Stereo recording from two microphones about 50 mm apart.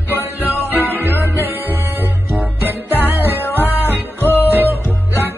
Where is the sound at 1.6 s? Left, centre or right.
Right.